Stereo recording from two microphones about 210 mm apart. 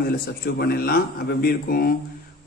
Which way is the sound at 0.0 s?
50° left (ahead or behind).